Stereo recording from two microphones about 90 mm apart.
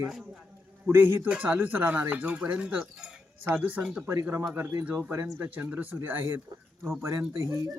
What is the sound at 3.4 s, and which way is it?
Speech, 25° right (ahead or behind).